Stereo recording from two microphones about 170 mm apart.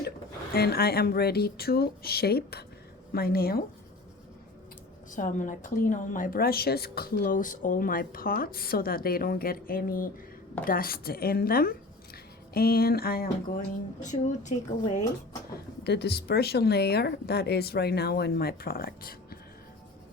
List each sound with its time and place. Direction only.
0.5 s a woman's voice: 65° left (ahead or behind)
5.1 s a woman's voice: 50° left (ahead or behind); by 13.2 s 65° left (ahead or behind)
14.0 s speech: 45° left (ahead or behind)
15.8 s speech: 75° left (ahead or behind)